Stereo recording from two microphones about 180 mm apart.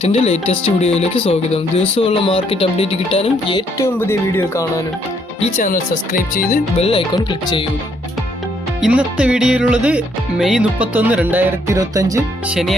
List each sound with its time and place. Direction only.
0.0 s speech: 35° left (ahead or behind)
3.8 s speech: 15° left (ahead or behind)
5.4 s speech: 45° left (ahead or behind)
6.7 s speech: 30° left (ahead or behind)
7.3 s music: 25° left (ahead or behind)
8.8 s music: 5° right (ahead or behind)
12.5 s speech: centre (ahead or behind)